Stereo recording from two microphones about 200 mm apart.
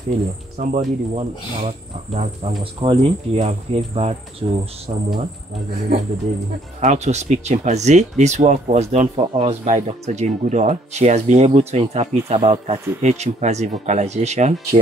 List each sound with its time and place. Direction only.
0.6 s speech: 35° right (ahead or behind)
6.8 s speech: 35° right (ahead or behind)